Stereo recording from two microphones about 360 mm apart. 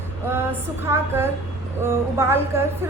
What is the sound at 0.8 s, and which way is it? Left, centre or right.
Speech, centre.